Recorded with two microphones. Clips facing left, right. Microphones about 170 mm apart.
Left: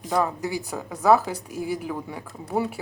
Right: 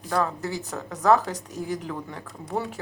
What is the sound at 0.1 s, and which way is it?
A woman's voice, 10° left (ahead or behind).